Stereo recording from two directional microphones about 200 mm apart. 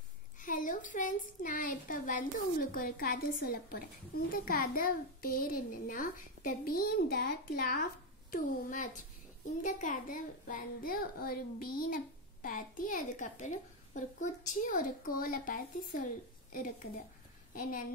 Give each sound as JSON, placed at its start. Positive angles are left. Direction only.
{"t": 0.4, "sound": "a child's voice", "side_deg": 40}
{"t": 17.6, "sound": "speech", "side_deg": 45}